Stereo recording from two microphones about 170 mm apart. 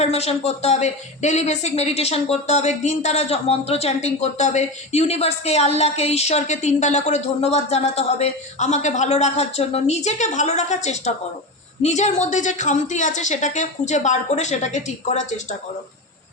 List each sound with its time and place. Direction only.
0.0 s a woman's voice: 40° left (ahead or behind)